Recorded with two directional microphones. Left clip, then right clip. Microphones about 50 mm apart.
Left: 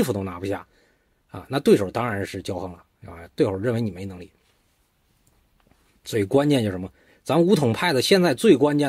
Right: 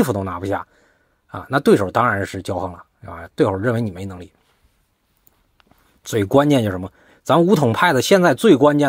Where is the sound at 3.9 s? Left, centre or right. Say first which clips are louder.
Right 4 dB; right.